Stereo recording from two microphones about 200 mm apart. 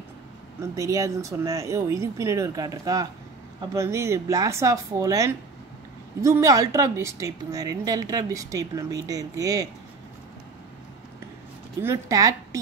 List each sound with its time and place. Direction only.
0.6 s speech: 15° right (ahead or behind)
11.8 s speech: 15° right (ahead or behind)